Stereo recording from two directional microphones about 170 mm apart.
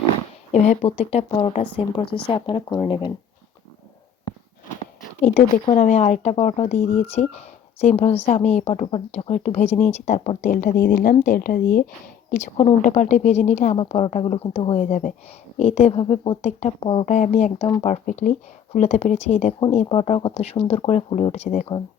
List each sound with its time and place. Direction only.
0.5 s speech: 45° left (ahead or behind); by 3.1 s 25° left (ahead or behind)
5.2 s a woman's voice: 40° left (ahead or behind); by 11.9 s 60° left (ahead or behind)
12.3 s speech: 45° left (ahead or behind)
13.7 s speech: 35° left (ahead or behind)
17.2 s speech: 45° left (ahead or behind)